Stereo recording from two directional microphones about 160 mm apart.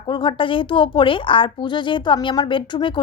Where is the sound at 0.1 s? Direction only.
30° left (ahead or behind).